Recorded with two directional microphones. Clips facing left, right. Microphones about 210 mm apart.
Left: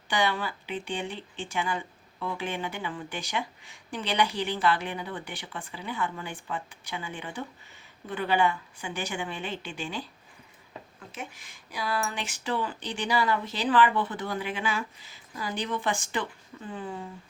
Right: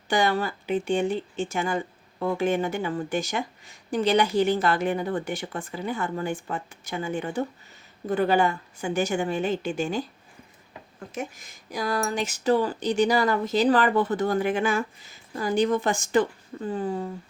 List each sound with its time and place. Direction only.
0.1 s speech: 45° right (ahead or behind)
11.1 s speech: 45° right (ahead or behind)